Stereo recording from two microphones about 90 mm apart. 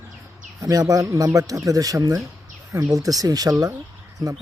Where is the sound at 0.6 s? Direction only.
40° right (ahead or behind).